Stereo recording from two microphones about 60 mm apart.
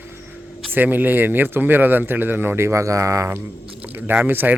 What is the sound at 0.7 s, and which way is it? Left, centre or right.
Speech, right.